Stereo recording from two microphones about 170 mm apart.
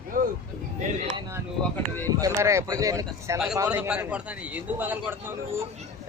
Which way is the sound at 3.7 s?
5° right (ahead or behind).